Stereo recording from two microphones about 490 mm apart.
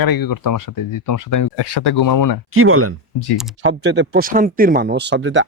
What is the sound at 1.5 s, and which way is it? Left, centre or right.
Speech, left.